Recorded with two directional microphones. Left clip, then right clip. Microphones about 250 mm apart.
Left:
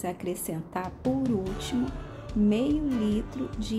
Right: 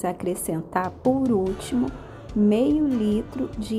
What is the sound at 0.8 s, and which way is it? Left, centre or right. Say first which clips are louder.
Music: right 5 dB; centre.